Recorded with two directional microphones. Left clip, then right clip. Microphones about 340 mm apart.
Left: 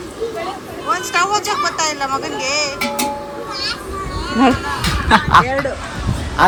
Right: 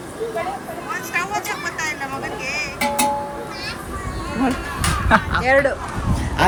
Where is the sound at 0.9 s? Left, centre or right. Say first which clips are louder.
Left 6 dB; centre.